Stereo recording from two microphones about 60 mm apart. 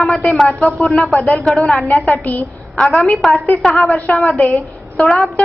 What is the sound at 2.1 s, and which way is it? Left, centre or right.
Speech, left.